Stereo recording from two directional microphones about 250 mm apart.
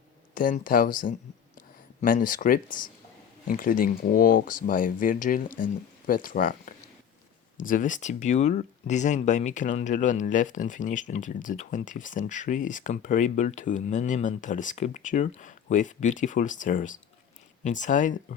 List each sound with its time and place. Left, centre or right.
0.3 s speech: left